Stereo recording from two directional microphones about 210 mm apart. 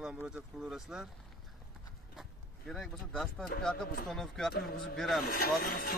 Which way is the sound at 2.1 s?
Centre (ahead or behind).